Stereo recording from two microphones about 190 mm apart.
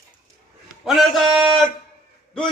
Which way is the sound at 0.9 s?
Centre (ahead or behind).